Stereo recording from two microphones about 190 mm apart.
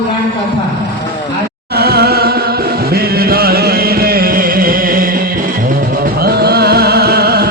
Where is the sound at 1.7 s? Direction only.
55° right (ahead or behind).